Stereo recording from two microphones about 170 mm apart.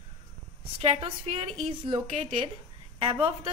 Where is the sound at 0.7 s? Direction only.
35° right (ahead or behind).